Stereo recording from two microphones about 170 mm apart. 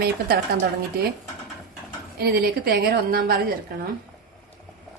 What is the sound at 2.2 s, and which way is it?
A woman's voice, 65° right (ahead or behind).